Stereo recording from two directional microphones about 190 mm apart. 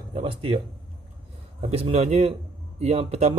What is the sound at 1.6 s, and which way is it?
A man's voice, 35° right (ahead or behind).